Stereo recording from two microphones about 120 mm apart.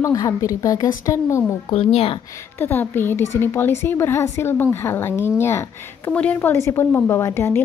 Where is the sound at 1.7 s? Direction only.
55° left (ahead or behind).